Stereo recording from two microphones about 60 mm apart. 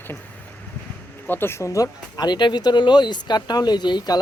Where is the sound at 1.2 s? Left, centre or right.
Left.